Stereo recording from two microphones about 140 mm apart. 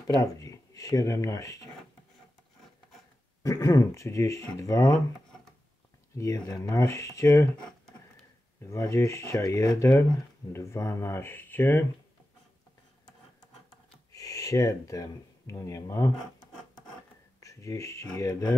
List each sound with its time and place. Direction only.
0.0 s speech: 25° left (ahead or behind)
3.4 s speech: 25° left (ahead or behind)
6.1 s speech: 25° left (ahead or behind)
8.6 s speech: 20° left (ahead or behind)
14.1 s speech: 25° left (ahead or behind)
17.4 s speech: 20° left (ahead or behind)